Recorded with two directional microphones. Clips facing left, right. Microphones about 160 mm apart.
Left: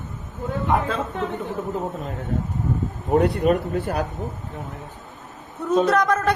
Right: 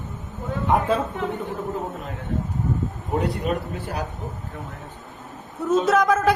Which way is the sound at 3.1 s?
55° left (ahead or behind).